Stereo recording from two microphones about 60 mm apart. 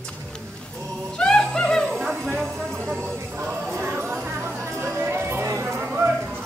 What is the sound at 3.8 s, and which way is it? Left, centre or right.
Music, right.